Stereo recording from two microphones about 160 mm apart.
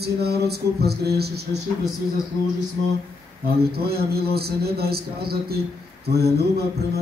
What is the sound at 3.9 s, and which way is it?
Speech, 75° right (ahead or behind).